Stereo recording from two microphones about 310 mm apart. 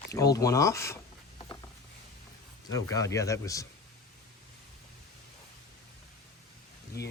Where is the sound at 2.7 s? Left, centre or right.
Centre.